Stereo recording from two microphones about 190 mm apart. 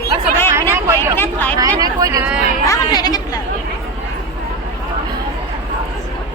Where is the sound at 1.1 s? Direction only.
10° left (ahead or behind).